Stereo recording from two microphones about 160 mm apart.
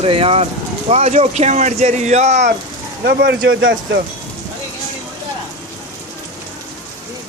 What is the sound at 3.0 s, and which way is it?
Speech, 90° right.